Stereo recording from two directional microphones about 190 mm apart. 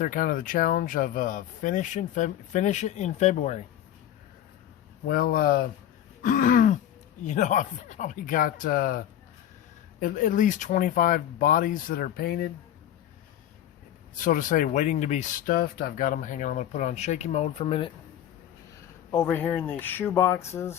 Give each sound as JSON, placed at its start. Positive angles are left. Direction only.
{"t": 0.0, "sound": "speech", "side_deg": 45}
{"t": 5.0, "sound": "speech", "side_deg": 50}
{"t": 14.2, "sound": "speech", "side_deg": 45}
{"t": 19.1, "sound": "speech", "side_deg": 10}